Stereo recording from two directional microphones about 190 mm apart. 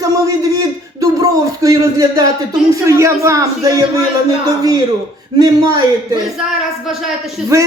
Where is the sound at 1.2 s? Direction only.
20° right (ahead or behind).